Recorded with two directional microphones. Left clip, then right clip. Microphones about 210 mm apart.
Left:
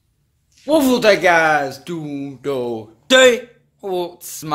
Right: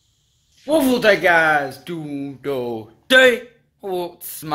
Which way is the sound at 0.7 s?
15° left (ahead or behind).